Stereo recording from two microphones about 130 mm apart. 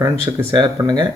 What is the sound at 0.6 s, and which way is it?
Speech, 35° right (ahead or behind).